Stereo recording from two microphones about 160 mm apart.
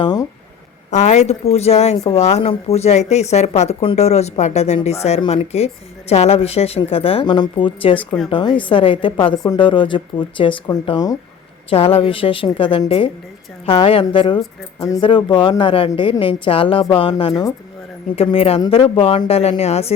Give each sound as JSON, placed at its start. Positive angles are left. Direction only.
{"t": 0.0, "sound": "a sound", "side_deg": 25}
{"t": 0.9, "sound": "a woman's voice", "side_deg": 45}
{"t": 11.7, "sound": "a woman's voice", "side_deg": 35}